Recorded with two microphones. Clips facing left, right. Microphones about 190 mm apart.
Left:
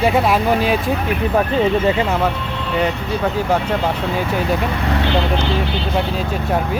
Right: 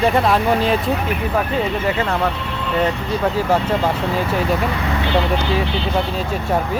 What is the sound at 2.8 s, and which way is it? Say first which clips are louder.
Speech: even; centre (ahead or behind).